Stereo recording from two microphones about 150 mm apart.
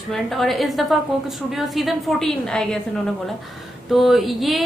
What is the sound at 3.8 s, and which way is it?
Speech, centre (ahead or behind).